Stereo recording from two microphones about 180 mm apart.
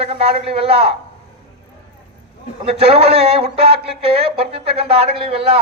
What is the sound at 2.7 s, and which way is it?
A man's voice, 35° right (ahead or behind).